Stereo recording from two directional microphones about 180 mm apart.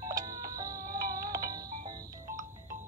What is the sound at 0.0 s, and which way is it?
Music, 20° right (ahead or behind).